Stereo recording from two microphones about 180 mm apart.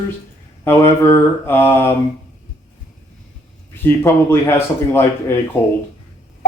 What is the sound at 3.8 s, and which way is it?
Mantra, 10° left (ahead or behind).